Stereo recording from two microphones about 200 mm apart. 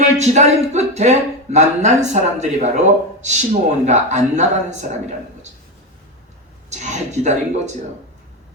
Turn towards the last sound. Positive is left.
turn(degrees=-35)  # may be behind; listen again after turning